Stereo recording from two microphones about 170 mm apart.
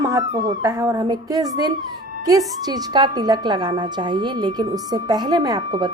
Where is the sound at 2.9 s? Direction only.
25° right (ahead or behind).